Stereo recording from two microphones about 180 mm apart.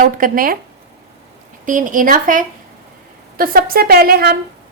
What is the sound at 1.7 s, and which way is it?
A woman's voice, 45° right (ahead or behind).